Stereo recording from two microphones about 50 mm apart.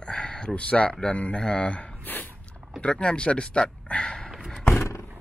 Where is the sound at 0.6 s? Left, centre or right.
Left.